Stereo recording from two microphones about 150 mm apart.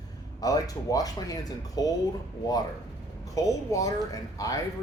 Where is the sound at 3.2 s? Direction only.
20° left (ahead or behind).